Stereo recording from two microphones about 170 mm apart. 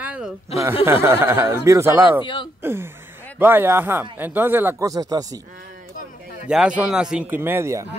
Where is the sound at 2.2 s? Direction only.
30° left (ahead or behind).